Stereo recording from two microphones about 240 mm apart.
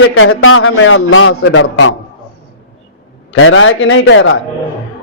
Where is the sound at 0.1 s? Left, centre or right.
Left.